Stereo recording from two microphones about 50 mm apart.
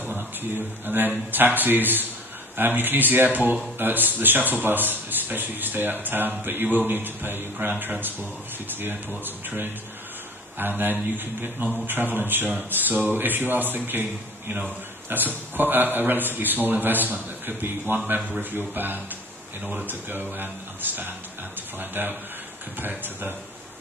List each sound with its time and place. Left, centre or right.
0.4 s a man's voice: right
15.0 s a man's voice: right